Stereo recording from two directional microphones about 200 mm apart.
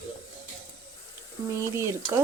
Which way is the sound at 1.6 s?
15° right (ahead or behind).